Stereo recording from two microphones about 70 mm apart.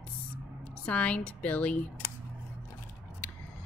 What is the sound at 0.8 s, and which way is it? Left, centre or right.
Speech, centre.